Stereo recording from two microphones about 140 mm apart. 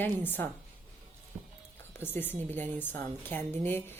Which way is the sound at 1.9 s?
15° left (ahead or behind).